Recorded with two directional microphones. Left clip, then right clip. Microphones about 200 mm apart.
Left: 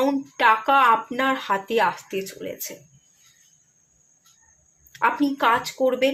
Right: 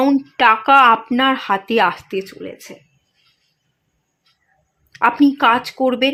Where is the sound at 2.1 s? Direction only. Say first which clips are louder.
Right 4 dB; 30° right (ahead or behind).